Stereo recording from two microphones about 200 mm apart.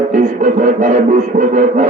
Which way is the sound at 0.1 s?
40° right (ahead or behind).